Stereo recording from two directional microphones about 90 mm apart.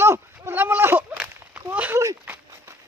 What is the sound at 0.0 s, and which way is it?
Sheep, 25° right (ahead or behind).